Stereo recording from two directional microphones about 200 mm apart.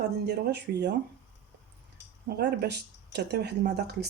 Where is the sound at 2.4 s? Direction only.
55° right (ahead or behind).